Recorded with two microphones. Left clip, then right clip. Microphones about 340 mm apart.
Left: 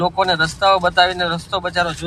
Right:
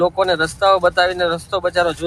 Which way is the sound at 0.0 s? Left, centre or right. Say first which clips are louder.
Right 1 dB; centre.